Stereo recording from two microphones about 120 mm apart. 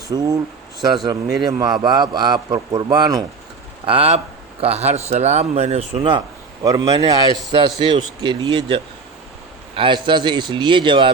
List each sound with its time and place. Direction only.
0.1 s a man's voice: 35° right (ahead or behind)
1.4 s a man's voice: 35° right (ahead or behind)
3.8 s speech: 55° right (ahead or behind)
6.0 s speech: 40° right (ahead or behind)
6.7 s a man's voice: 30° right (ahead or behind)